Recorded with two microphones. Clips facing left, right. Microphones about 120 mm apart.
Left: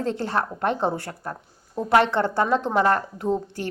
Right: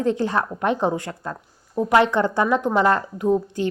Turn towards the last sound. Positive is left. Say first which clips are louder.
# right 5 dB
turn(degrees=-15)  # may be behind; listen again after turning